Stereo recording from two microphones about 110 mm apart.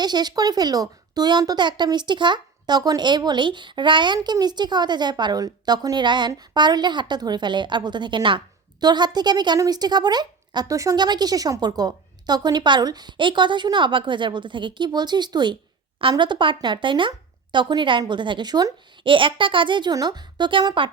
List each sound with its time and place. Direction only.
0.0 s a woman's voice: 40° right (ahead or behind)